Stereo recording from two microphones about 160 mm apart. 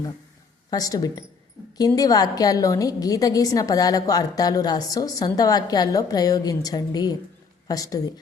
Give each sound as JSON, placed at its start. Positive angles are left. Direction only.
{"t": 0.7, "sound": "a woman's voice", "side_deg": 25}